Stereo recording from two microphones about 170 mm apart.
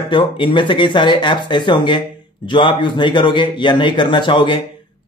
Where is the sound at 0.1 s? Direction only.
30° left (ahead or behind).